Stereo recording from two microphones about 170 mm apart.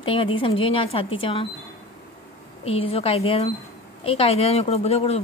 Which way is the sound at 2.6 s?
35° left (ahead or behind).